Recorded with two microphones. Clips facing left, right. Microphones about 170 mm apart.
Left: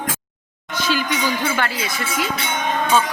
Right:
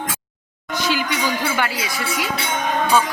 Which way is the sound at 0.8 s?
15° right (ahead or behind).